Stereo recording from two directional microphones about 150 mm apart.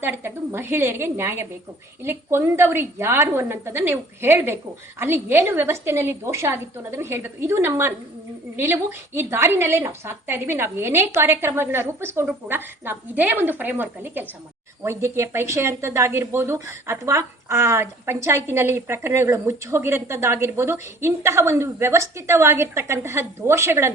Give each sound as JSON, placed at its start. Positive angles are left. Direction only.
{"t": 0.0, "sound": "a woman's voice", "side_deg": -15}